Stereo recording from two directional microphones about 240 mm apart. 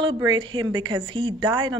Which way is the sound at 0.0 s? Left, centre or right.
Centre.